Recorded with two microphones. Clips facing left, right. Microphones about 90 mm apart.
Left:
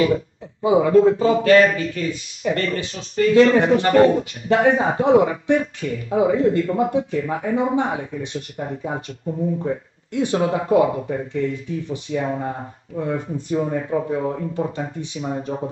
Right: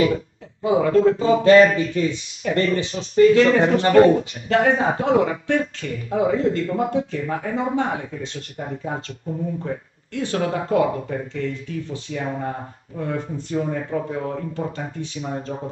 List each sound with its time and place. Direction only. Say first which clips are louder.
0.7 s speech: left 2 dB; 15° left (ahead or behind)
1.2 s a sound: right 1 dB; 25° right (ahead or behind)
3.3 s speech: left 2 dB; 15° left (ahead or behind)
3.8 s a sound: right 1 dB; 25° right (ahead or behind)
4.5 s speech: left 1 dB; 15° left (ahead or behind)
10.1 s speech: left 3 dB; 20° left (ahead or behind)